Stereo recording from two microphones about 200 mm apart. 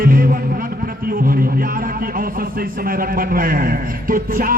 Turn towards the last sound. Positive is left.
turn(degrees=-45)  # may be behind; listen again after turning